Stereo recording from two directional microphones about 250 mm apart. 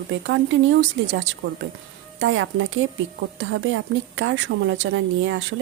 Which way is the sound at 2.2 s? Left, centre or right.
Right.